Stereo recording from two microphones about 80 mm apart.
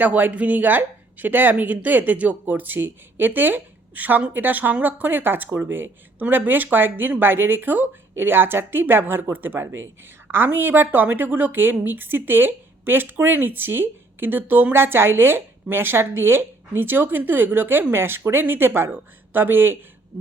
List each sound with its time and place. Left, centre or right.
0.0 s a woman's voice: right